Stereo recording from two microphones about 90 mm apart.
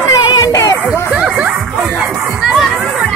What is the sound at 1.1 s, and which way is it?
Music, 10° right (ahead or behind).